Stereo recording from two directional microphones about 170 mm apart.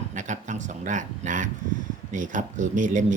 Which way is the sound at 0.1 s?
45° right (ahead or behind).